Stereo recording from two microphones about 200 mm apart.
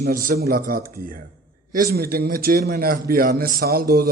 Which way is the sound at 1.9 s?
50° right (ahead or behind).